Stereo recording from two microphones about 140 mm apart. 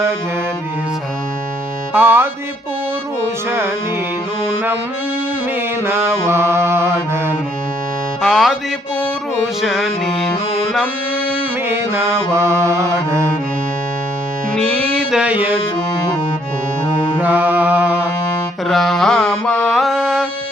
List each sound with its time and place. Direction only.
1.9 s music: 15° right (ahead or behind)
5.8 s music: 15° right (ahead or behind)
8.2 s music: centre (ahead or behind)
9.6 s music: centre (ahead or behind)
11.7 s mantra: 20° right (ahead or behind)
15.1 s mantra: 10° right (ahead or behind)
17.2 s music: 10° right (ahead or behind)
18.7 s mantra: centre (ahead or behind)